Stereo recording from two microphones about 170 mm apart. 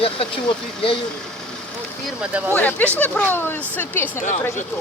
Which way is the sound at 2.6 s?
10° left (ahead or behind).